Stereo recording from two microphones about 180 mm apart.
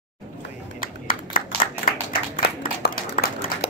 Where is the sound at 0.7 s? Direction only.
50° left (ahead or behind).